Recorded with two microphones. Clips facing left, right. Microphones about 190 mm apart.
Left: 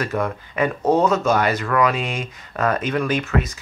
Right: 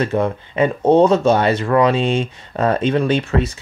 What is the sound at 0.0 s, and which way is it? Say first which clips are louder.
Speech: right 5 dB; 25° right (ahead or behind).